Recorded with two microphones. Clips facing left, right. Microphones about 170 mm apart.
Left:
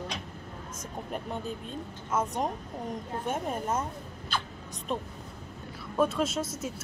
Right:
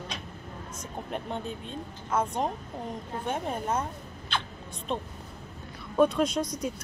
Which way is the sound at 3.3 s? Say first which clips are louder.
Right 1 dB; 5° left (ahead or behind).